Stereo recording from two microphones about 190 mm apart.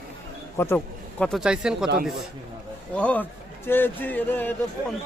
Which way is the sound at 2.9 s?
5° left (ahead or behind).